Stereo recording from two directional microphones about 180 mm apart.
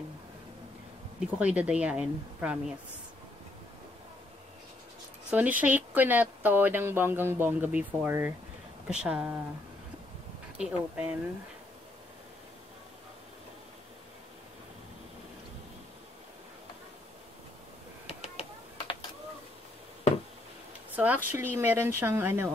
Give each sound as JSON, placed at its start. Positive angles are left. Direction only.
{"t": 1.4, "sound": "speech", "side_deg": -5}
{"t": 5.3, "sound": "speech", "side_deg": -10}
{"t": 10.6, "sound": "speech", "side_deg": -5}
{"t": 18.0, "sound": "a sound", "side_deg": 35}
{"t": 20.9, "sound": "speech", "side_deg": -10}